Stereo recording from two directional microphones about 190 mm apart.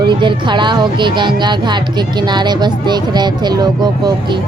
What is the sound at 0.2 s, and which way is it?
Speech, 25° right (ahead or behind).